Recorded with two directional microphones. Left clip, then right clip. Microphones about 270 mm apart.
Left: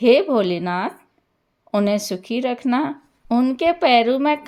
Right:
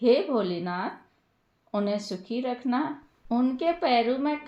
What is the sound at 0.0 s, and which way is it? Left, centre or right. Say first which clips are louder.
Speech: left 8 dB; left.